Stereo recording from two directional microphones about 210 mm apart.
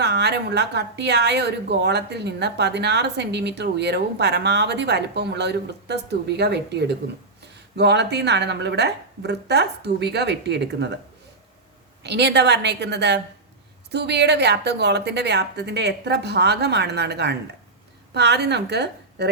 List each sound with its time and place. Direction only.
0.0 s a woman's voice: 55° right (ahead or behind)
12.0 s a woman's voice: 55° right (ahead or behind)